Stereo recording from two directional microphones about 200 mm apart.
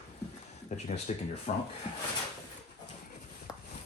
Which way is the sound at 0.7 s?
35° left (ahead or behind).